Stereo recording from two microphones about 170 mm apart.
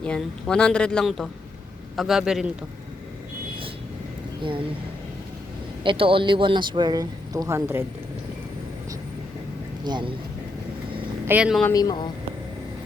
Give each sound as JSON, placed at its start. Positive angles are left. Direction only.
{"t": 0.0, "sound": "a woman's voice", "side_deg": 5}
{"t": 5.8, "sound": "speech", "side_deg": -30}
{"t": 9.8, "sound": "speech", "side_deg": -25}
{"t": 11.3, "sound": "speech", "side_deg": -5}
{"t": 11.6, "sound": "speech", "side_deg": 20}